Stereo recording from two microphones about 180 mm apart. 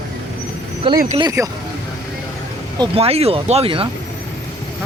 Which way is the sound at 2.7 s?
35° right (ahead or behind).